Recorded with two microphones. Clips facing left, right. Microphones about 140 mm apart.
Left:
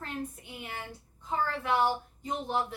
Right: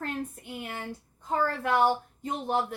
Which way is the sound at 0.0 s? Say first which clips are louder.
Right 3 dB; 50° right (ahead or behind).